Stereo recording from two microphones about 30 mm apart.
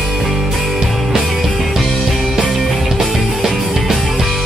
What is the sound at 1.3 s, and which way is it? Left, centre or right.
Music, centre.